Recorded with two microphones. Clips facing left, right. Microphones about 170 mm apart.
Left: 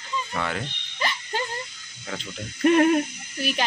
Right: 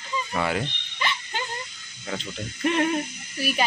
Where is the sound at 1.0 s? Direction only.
40° left (ahead or behind).